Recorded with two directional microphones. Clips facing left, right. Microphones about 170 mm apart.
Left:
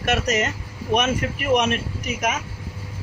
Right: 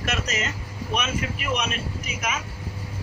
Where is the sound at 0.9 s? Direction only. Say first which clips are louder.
Left 6 dB; 45° left (ahead or behind).